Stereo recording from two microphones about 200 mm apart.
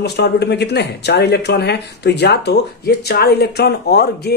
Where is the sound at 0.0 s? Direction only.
55° left (ahead or behind).